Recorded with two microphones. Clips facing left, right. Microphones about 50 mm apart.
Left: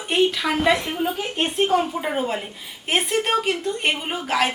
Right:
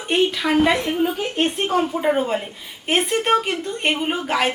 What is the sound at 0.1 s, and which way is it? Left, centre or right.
A woman's voice, centre.